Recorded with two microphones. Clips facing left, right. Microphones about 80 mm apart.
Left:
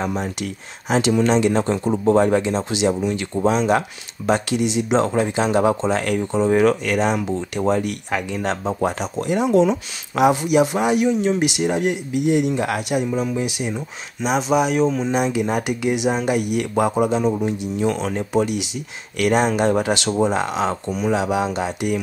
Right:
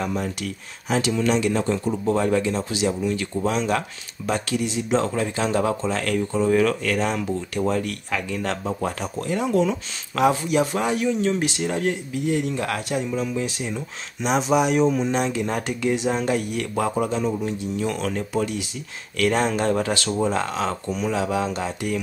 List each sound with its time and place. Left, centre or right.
0.0 s speech: left
14.2 s speech: centre
15.1 s speech: centre